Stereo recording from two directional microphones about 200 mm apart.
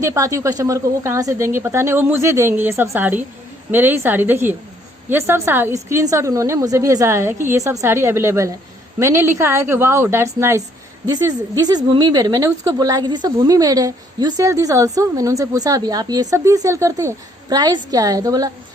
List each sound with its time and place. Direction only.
0.0 s a woman's voice: 15° right (ahead or behind)